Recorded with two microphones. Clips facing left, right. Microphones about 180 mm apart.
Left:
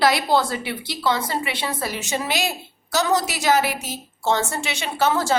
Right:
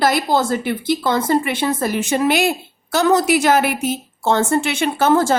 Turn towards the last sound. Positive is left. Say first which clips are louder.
# right 6 dB
turn(degrees=-50)  # may be behind; listen again after turning